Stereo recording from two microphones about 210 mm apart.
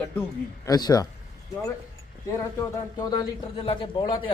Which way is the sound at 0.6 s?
15° left (ahead or behind).